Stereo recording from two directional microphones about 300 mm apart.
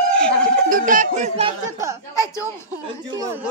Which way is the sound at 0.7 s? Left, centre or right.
Right.